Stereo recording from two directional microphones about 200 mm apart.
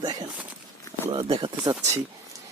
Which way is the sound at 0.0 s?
20° right (ahead or behind).